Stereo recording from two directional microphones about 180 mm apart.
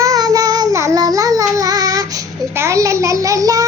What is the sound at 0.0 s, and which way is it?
Child singing, 20° right (ahead or behind).